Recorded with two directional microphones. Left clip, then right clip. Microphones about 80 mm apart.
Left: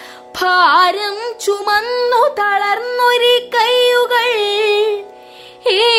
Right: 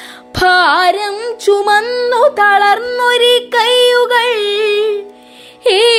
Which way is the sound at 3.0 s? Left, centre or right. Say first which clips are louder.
Left 1 dB; right.